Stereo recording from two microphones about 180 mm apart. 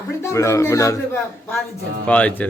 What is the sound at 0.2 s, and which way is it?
A man's voice, 15° left (ahead or behind).